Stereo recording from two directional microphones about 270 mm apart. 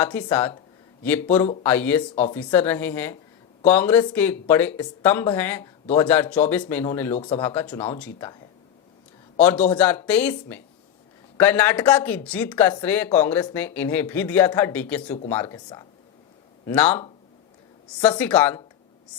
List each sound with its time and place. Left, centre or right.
0.0 s speech: centre
7.2 s speech: centre
9.4 s speech: centre
18.2 s speech: centre